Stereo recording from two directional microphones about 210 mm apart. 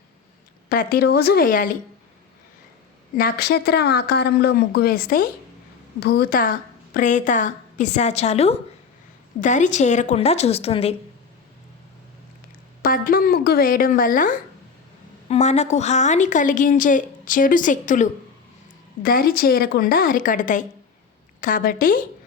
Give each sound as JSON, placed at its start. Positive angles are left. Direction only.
{"t": 0.7, "sound": "speech", "side_deg": 45}
{"t": 3.2, "sound": "a woman's voice", "side_deg": 45}
{"t": 12.8, "sound": "a woman's voice", "side_deg": 45}